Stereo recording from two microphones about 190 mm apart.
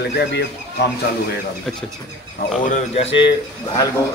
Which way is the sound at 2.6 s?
35° left (ahead or behind).